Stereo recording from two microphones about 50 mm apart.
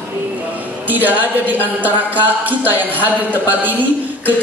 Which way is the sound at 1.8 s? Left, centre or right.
Right.